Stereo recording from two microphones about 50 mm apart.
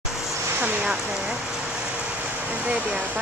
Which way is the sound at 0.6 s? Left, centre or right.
Right.